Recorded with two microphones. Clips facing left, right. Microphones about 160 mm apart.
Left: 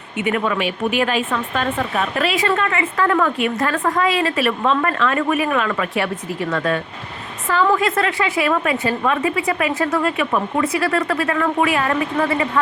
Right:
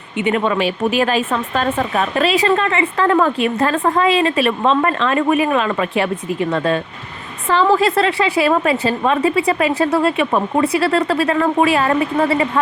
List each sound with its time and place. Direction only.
0.3 s speech: 25° right (ahead or behind)